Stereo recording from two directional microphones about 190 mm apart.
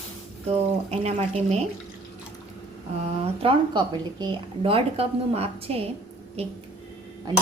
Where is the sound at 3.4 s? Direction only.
25° right (ahead or behind).